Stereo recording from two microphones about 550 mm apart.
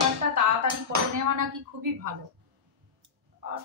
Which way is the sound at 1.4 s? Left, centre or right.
Right.